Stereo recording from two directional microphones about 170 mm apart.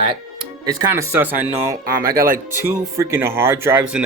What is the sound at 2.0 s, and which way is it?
Speech, 60° right (ahead or behind).